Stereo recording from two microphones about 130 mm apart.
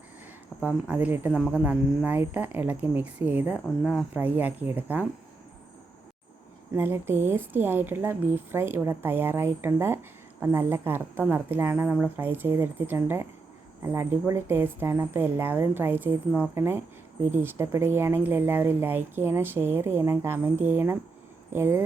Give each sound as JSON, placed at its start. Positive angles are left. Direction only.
{"t": 0.6, "sound": "speech", "side_deg": -15}
{"t": 6.7, "sound": "speech", "side_deg": -15}